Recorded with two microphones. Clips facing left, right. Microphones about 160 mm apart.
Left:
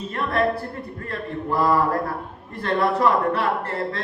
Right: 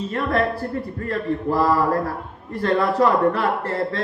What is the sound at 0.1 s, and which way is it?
A man's voice, 40° right (ahead or behind).